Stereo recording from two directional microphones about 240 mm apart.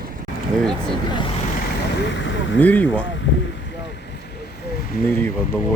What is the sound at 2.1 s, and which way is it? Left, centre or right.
Boat, left.